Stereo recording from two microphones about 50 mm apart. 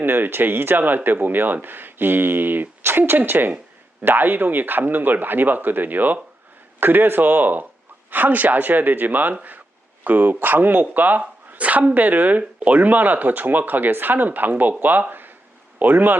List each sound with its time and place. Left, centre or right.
0.0 s speech: right
15.1 s a sound: right
15.8 s speech: right